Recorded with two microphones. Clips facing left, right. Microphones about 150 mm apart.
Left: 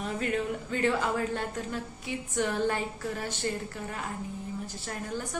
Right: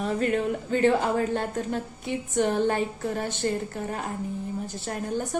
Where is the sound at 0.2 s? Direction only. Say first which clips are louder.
Right 5 dB; 40° right (ahead or behind).